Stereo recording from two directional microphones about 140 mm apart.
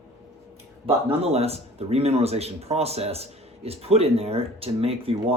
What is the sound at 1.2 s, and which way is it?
Speech, 45° right (ahead or behind).